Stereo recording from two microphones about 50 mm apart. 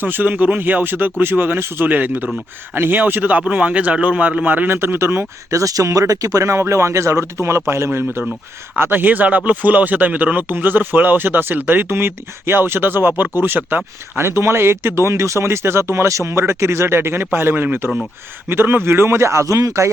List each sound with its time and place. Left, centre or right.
0.0 s speech: right
1.9 s speech: right
4.9 s speech: right
6.3 s speech: right
7.9 s speech: right
8.9 s speech: right
14.2 s speech: right